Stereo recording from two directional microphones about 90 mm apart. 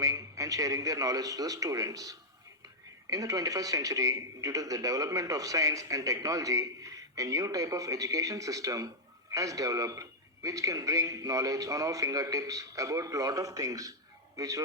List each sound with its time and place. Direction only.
0.0 s speech: 40° right (ahead or behind)